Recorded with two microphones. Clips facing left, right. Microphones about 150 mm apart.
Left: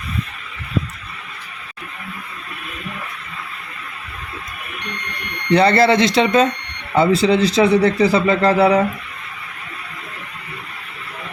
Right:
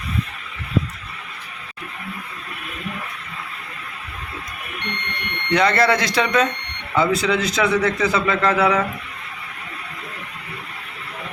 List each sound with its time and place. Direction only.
5.5 s a man's voice: 30° left (ahead or behind)